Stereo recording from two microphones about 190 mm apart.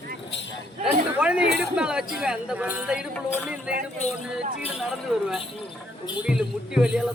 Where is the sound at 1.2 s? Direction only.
5° right (ahead or behind).